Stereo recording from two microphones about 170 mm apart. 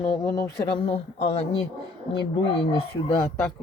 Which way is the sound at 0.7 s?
40° left (ahead or behind).